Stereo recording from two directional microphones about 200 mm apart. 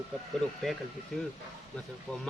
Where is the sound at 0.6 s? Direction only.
Centre (ahead or behind).